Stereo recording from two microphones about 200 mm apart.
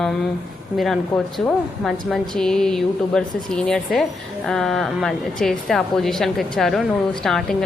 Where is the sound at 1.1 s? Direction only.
Centre (ahead or behind).